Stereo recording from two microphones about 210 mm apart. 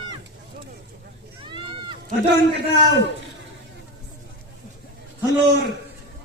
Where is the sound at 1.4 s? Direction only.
20° right (ahead or behind).